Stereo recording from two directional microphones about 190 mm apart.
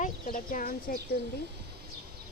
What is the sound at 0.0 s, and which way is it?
Speech, 45° left (ahead or behind).